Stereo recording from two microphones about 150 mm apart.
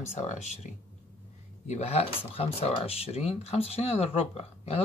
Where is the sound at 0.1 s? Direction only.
50° left (ahead or behind).